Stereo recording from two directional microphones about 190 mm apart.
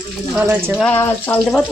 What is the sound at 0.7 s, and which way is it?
Speech, 5° left (ahead or behind).